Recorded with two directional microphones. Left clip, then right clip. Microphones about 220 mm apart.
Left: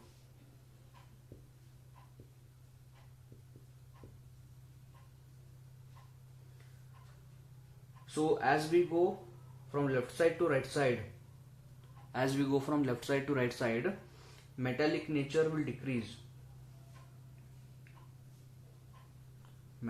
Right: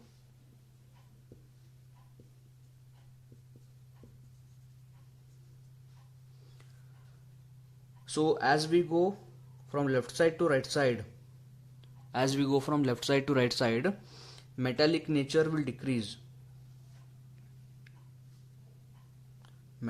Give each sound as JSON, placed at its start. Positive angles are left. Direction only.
{"t": 8.0, "sound": "speech", "side_deg": -40}
{"t": 12.1, "sound": "speech", "side_deg": -40}